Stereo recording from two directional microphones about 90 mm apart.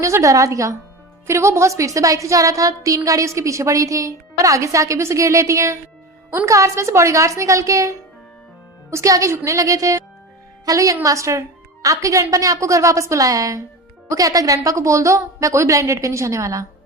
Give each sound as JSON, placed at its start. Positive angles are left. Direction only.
{"t": 0.0, "sound": "a woman's voice", "side_deg": -35}